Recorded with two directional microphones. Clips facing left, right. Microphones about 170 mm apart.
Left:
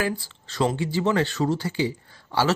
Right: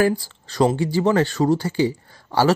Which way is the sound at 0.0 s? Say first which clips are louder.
Right 8 dB; 40° right (ahead or behind).